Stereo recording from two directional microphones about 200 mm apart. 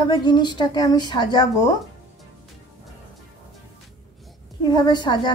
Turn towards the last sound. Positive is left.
turn(degrees=20)  # may be behind; listen again after turning